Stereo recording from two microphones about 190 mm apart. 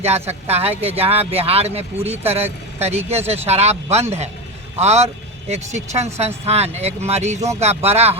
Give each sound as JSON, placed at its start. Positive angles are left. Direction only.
{"t": 0.0, "sound": "speech", "side_deg": -35}